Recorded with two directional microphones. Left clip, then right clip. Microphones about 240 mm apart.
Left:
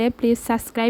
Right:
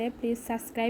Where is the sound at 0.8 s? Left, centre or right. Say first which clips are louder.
Left 7 dB; left.